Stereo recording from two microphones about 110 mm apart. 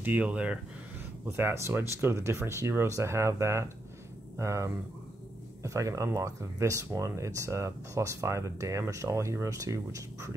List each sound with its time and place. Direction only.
0.0 s speech: 15° right (ahead or behind)
1.2 s speech: 20° right (ahead or behind)